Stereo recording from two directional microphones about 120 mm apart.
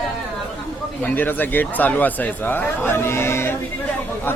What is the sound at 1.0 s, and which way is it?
Speech, 15° left (ahead or behind).